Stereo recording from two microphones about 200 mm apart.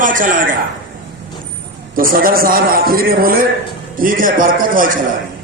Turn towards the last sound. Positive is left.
turn(degrees=-45)  # may be behind; listen again after turning